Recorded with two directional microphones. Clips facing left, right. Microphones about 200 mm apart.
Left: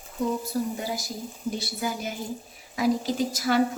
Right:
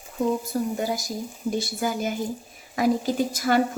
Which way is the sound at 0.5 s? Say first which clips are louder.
Right 3 dB; 50° right (ahead or behind).